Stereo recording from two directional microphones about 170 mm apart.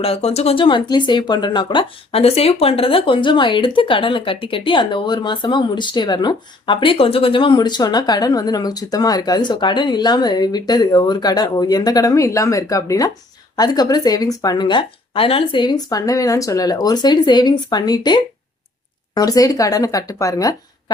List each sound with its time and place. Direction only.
0.0 s speech: 35° left (ahead or behind); by 20.9 s 20° left (ahead or behind)